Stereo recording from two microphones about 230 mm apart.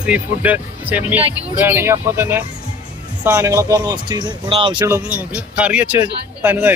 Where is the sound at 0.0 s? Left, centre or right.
Centre.